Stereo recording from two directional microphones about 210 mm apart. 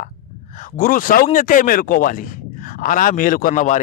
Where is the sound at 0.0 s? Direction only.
35° left (ahead or behind).